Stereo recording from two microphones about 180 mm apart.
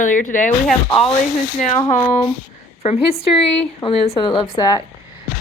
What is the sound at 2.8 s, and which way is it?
A woman's voice, 35° left (ahead or behind).